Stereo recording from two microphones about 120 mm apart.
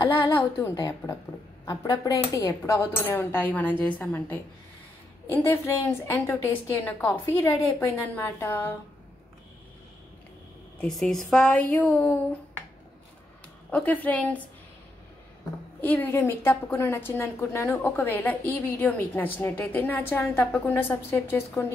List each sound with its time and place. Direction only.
0.6 s a woman's voice: 25° left (ahead or behind)
10.8 s a woman's voice: 5° left (ahead or behind)
13.7 s a woman's voice: 10° left (ahead or behind)
15.8 s a woman's voice: 15° left (ahead or behind)